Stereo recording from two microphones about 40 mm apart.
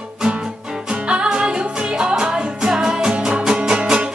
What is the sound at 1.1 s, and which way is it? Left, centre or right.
Music, right.